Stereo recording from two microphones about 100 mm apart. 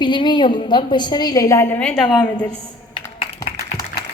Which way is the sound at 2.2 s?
10° left (ahead or behind).